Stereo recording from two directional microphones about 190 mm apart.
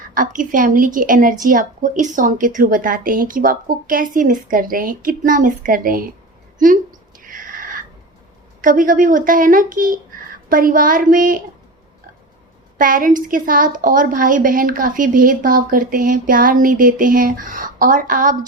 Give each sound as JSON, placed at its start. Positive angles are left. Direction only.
{"t": 0.1, "sound": "a woman's voice", "side_deg": -45}
{"t": 7.2, "sound": "a sound", "side_deg": -45}
{"t": 8.6, "sound": "a woman's voice", "side_deg": -45}
{"t": 12.7, "sound": "a woman's voice", "side_deg": -45}